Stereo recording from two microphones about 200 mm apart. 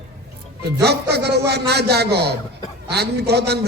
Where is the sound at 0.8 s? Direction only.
55° right (ahead or behind).